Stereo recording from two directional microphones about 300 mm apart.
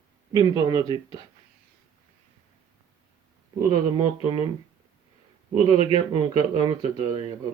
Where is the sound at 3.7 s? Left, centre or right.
Centre.